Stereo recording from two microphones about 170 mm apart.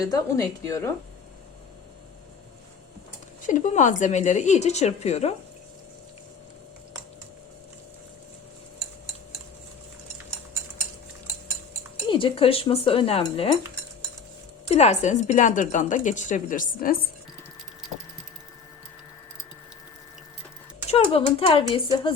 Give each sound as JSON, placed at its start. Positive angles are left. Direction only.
{"t": 0.0, "sound": "speech", "side_deg": 20}
{"t": 3.4, "sound": "speech", "side_deg": 45}
{"t": 12.0, "sound": "speech", "side_deg": 30}
{"t": 14.7, "sound": "speech", "side_deg": 40}
{"t": 20.9, "sound": "speech", "side_deg": 35}